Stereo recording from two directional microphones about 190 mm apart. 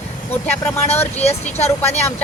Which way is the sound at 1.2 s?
35° left (ahead or behind).